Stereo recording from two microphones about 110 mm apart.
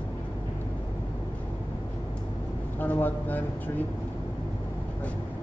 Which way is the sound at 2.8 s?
15° left (ahead or behind).